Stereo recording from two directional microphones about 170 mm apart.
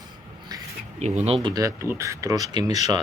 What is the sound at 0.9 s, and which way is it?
Speech, 40° right (ahead or behind).